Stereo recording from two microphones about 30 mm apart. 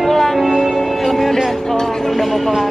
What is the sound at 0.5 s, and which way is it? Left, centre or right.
Music, centre.